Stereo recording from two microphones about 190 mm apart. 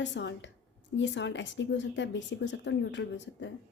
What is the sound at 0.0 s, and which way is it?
A woman's voice, 70° left (ahead or behind).